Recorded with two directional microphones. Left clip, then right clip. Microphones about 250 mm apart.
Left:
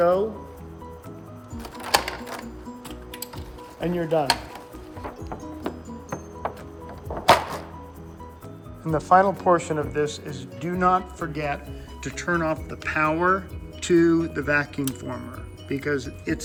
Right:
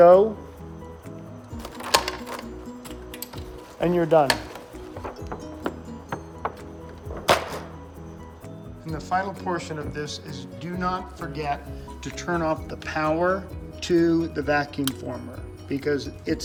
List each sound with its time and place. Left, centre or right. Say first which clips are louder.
0.0 s speech: right 7 dB; right
1.5 s music: even; centre
3.8 s speech: right 5 dB; right
5.3 s music: right 1 dB; centre
7.3 s music: left 4 dB; centre
8.8 s speech: left 9 dB; centre